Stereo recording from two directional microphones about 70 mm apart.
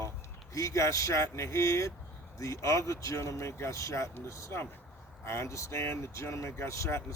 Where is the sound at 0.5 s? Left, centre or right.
Left.